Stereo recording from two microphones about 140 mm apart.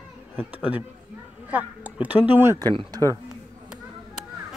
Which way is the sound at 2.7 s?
25° right (ahead or behind).